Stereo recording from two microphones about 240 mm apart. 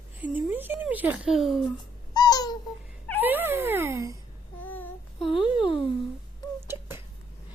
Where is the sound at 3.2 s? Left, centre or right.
Centre.